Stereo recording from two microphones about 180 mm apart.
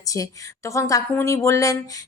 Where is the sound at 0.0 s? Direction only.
20° left (ahead or behind).